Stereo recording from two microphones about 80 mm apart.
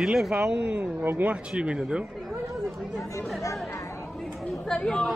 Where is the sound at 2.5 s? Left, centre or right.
Centre.